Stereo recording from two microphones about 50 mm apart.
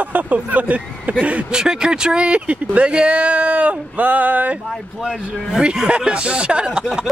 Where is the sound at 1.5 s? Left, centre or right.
Centre; by 4.6 s right.